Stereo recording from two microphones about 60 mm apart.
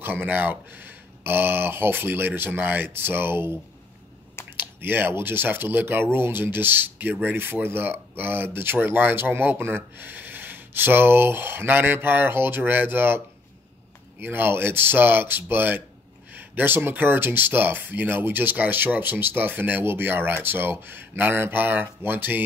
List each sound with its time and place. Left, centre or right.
0.0 s speech: right
14.2 s speech: right